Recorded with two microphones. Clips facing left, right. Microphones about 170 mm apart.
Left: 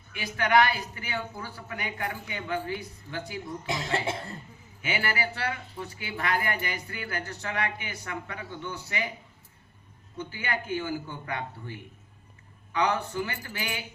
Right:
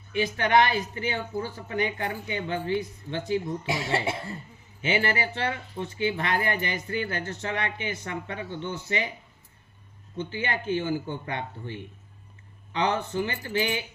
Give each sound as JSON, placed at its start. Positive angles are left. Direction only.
{"t": 0.1, "sound": "speech", "side_deg": -25}
{"t": 3.7, "sound": "speech", "side_deg": -10}
{"t": 4.8, "sound": "speech", "side_deg": -25}
{"t": 10.2, "sound": "speech", "side_deg": -25}